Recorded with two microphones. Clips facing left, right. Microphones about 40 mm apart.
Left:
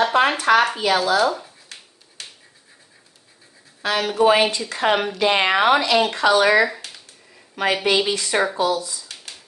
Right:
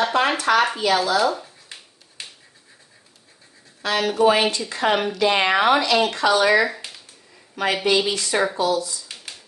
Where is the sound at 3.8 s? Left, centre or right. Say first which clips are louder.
Even; centre.